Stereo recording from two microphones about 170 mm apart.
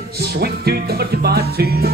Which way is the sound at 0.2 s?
70° right (ahead or behind).